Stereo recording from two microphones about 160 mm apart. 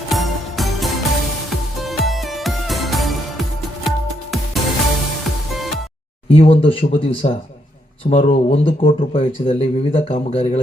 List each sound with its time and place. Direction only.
0.1 s music: centre (ahead or behind)
6.2 s speech: 35° left (ahead or behind)